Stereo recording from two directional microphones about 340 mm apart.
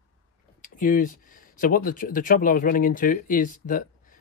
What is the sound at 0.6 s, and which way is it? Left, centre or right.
Speech, left.